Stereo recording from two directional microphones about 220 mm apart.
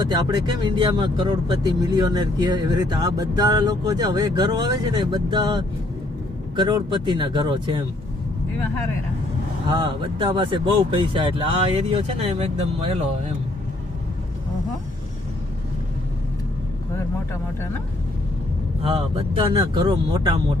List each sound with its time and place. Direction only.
0.1 s speech: 20° right (ahead or behind)
9.6 s speech: 20° right (ahead or behind)
18.8 s speech: 25° right (ahead or behind)